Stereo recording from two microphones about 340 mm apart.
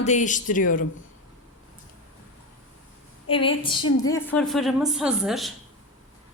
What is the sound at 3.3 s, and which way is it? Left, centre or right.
A woman's voice, centre.